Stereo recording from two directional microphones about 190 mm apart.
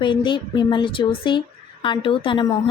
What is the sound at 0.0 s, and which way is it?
A woman's voice, 25° left (ahead or behind).